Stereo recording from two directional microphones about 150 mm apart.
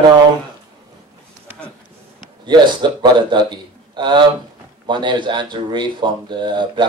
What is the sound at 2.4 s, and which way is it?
A man's voice, 30° right (ahead or behind).